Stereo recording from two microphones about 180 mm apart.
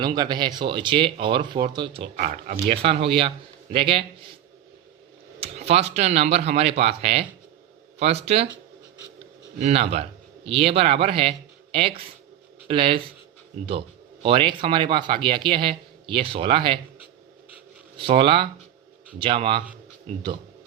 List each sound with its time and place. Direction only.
0.0 s speech: 25° right (ahead or behind)
5.4 s speech: 35° right (ahead or behind)
9.6 s speech: 35° right (ahead or behind)
17.9 s speech: 30° right (ahead or behind)